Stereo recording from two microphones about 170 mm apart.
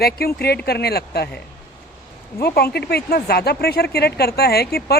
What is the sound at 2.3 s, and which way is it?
Speech, 65° left (ahead or behind).